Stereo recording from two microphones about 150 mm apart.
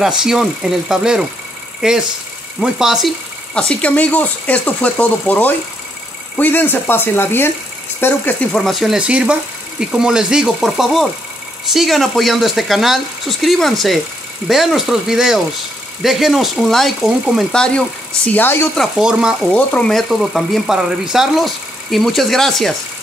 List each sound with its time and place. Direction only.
0.0 s speech: 5° right (ahead or behind)
3.5 s speech: 10° left (ahead or behind)
18.8 s speech: 5° right (ahead or behind)
19.5 s speech: 10° left (ahead or behind)